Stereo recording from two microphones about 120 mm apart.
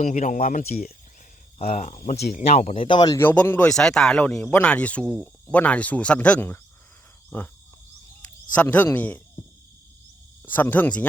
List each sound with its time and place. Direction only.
0.0 s speech: 90° left
1.5 s speech: 80° left
2.0 s speech: 60° left (ahead or behind)
2.7 s speech: 45° left (ahead or behind)
3.2 s speech: 15° left (ahead or behind)
3.7 s speech: 5° left (ahead or behind)
7.3 s cricket: 15° left (ahead or behind)
8.5 s speech: 15° left (ahead or behind)
10.4 s speech: 15° left (ahead or behind)